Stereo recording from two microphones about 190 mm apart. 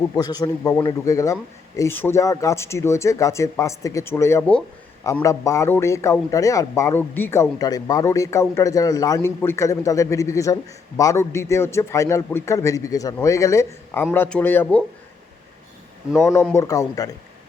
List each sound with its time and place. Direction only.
0.2 s a man's voice: 20° left (ahead or behind)
16.1 s a man's voice: 10° left (ahead or behind)